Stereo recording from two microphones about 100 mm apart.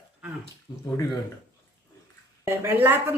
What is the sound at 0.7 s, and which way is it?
Speech, 35° left (ahead or behind).